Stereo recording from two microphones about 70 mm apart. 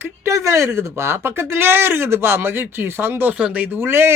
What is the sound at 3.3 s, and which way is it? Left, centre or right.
Speech, centre.